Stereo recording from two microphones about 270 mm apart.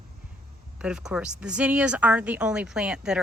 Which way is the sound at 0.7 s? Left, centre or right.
Centre.